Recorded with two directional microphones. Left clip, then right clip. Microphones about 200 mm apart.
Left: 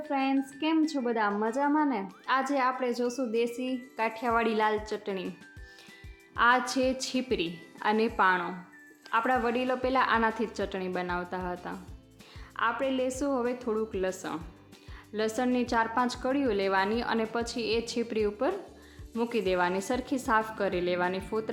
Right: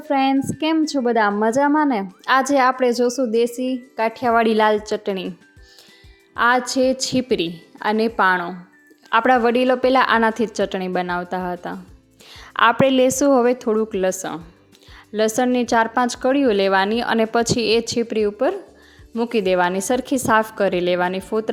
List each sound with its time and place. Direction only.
0.1 s speech: 40° right (ahead or behind)
6.3 s speech: 35° right (ahead or behind)